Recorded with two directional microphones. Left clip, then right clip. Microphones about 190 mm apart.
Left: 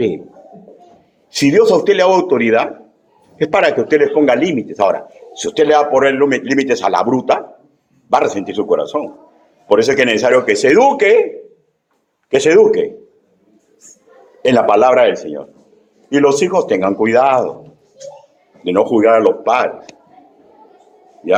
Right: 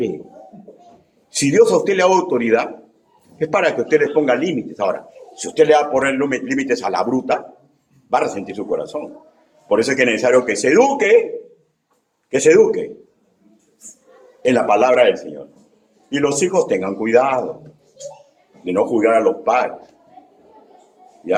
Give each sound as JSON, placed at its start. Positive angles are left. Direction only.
{"t": 1.3, "sound": "a man's voice", "side_deg": 30}
{"t": 12.3, "sound": "a man's voice", "side_deg": 35}
{"t": 14.4, "sound": "a man's voice", "side_deg": 35}
{"t": 18.6, "sound": "a man's voice", "side_deg": 40}